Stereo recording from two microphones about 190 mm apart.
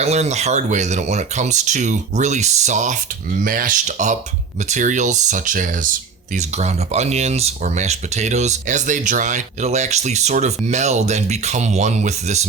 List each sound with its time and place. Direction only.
0.0 s speech: 35° right (ahead or behind)